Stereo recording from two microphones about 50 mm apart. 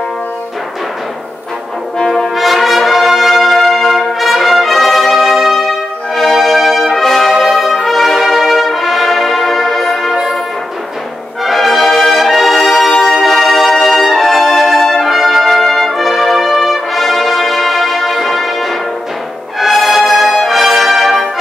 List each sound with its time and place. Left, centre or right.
2.0 s brass instrument: centre
2.3 s brass instrument: centre
10.1 s brass instrument: centre
11.4 s brass instrument: centre